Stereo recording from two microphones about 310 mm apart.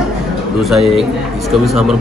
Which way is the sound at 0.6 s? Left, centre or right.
Centre.